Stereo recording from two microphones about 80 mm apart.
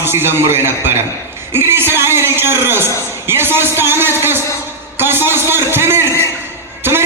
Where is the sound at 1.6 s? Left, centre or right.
Right.